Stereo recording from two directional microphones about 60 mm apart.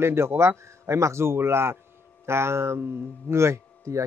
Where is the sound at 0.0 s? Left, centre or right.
Right.